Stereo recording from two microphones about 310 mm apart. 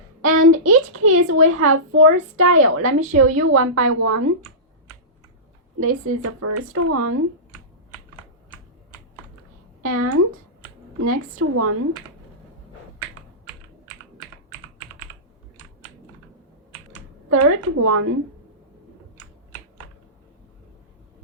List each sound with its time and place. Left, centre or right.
0.3 s a woman's voice: right
5.8 s a woman's voice: right
9.8 s a woman's voice: right
17.2 s a woman's voice: right